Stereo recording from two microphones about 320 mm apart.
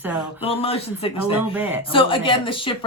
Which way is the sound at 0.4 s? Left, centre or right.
Centre.